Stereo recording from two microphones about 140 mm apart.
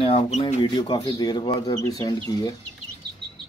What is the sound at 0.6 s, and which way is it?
Speech, 30° left (ahead or behind).